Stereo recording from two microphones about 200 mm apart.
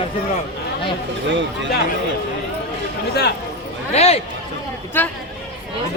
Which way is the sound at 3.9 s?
30° left (ahead or behind).